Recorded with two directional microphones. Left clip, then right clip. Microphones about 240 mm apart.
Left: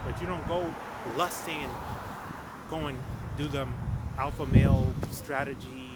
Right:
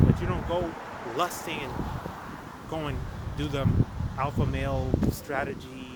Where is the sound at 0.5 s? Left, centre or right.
Centre.